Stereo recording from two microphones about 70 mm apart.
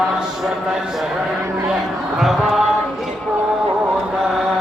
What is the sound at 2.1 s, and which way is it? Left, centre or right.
Music, centre.